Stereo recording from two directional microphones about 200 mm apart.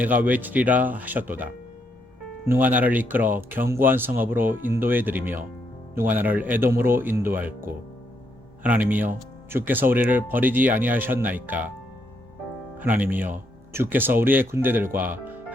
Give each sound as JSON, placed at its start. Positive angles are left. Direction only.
{"t": 0.0, "sound": "speech", "side_deg": -10}
{"t": 2.5, "sound": "speech", "side_deg": -10}
{"t": 12.8, "sound": "speech", "side_deg": -10}
{"t": 14.9, "sound": "music", "side_deg": -10}